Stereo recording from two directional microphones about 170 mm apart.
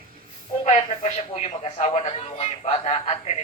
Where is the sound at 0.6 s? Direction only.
40° left (ahead or behind).